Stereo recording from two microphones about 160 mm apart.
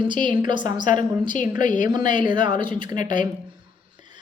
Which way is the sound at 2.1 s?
30° right (ahead or behind).